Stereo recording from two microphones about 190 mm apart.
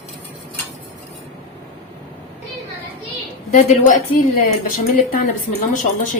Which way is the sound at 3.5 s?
40° left (ahead or behind).